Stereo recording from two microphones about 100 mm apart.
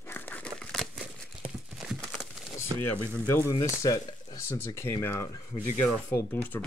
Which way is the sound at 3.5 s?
35° left (ahead or behind).